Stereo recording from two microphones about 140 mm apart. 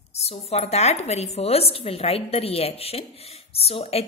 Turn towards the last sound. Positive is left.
turn(degrees=45)  # may be behind; listen again after turning